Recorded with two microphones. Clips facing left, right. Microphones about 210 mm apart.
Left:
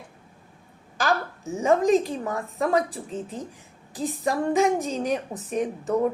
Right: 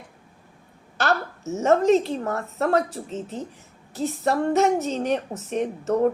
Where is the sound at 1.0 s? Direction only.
15° left (ahead or behind).